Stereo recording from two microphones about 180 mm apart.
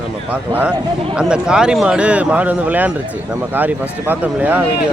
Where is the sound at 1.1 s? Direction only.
5° right (ahead or behind).